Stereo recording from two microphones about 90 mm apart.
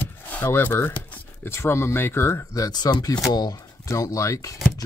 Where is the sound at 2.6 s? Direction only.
50° left (ahead or behind).